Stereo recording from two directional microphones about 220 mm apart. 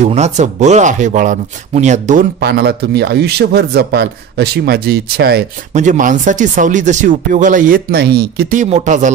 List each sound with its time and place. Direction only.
0.0 s speech: 30° right (ahead or behind)
5.7 s speech: 35° right (ahead or behind)